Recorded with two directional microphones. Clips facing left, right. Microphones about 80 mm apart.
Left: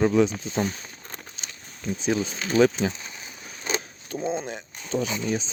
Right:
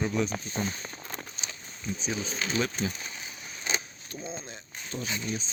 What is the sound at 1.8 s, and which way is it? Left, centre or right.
Speech, left.